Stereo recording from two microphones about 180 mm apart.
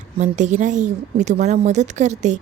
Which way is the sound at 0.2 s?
40° right (ahead or behind).